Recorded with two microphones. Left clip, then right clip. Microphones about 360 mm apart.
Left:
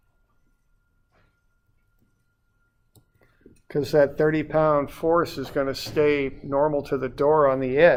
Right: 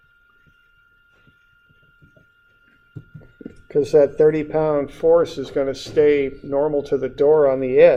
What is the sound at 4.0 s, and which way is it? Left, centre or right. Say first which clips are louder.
Speech: right 5 dB; left.